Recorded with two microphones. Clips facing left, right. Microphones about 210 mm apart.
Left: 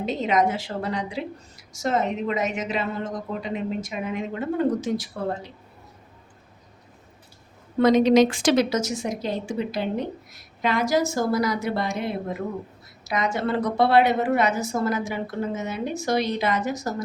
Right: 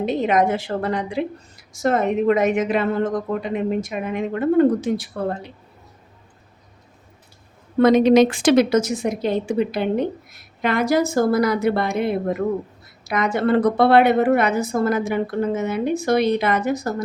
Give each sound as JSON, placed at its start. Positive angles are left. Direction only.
{"t": 0.0, "sound": "a woman's voice", "side_deg": -55}
{"t": 7.8, "sound": "a woman's voice", "side_deg": -60}